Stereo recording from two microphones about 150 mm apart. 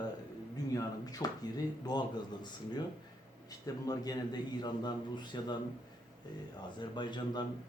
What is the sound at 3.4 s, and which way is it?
A man's voice, 25° left (ahead or behind).